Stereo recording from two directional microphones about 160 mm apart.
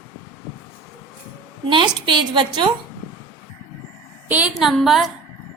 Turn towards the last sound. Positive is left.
turn(degrees=0)  # may be behind; listen again after turning